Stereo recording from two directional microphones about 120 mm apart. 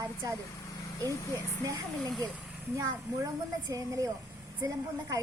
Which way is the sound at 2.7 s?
25° right (ahead or behind).